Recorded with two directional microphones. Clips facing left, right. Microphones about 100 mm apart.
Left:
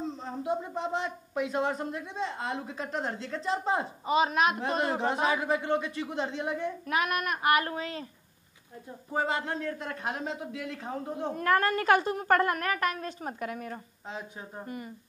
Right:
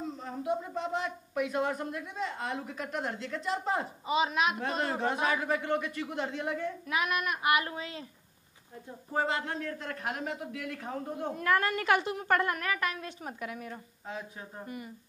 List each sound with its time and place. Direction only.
0.0 s a man's voice: 30° left (ahead or behind)
4.0 s a woman's voice: 45° left (ahead or behind)
4.6 s a man's voice: 25° left (ahead or behind)
6.9 s a woman's voice: 45° left (ahead or behind)
9.1 s a man's voice: 20° left (ahead or behind)
11.3 s a woman's voice: 45° left (ahead or behind)
14.0 s a man's voice: 25° left (ahead or behind)